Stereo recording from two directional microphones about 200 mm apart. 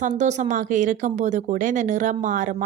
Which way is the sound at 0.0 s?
35° right (ahead or behind).